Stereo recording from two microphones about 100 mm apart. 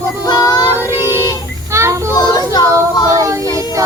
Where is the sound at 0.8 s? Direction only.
25° right (ahead or behind).